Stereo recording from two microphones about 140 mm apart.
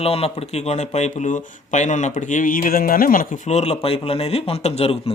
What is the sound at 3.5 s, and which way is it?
A man's voice, 50° left (ahead or behind).